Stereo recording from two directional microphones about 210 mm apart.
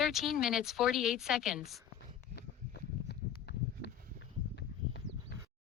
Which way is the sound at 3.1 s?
50° left (ahead or behind).